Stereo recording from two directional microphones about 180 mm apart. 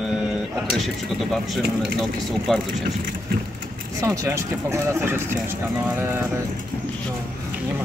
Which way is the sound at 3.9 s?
15° right (ahead or behind).